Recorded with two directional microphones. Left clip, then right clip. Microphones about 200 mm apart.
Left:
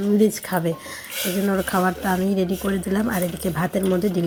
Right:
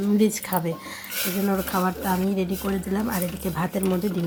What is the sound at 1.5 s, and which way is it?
Speech, 20° left (ahead or behind).